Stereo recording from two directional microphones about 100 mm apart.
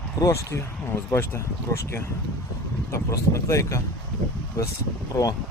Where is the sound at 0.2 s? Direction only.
30° left (ahead or behind).